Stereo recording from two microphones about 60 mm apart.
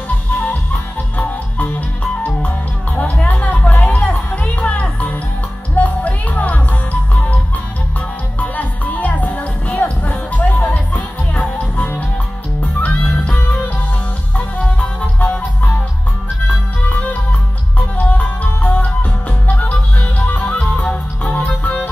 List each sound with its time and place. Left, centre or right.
0.3 s music: left
3.0 s music: left
8.4 s music: left